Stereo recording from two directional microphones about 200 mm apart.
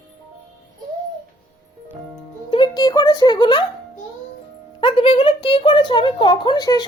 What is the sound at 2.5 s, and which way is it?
A woman's voice, 20° left (ahead or behind).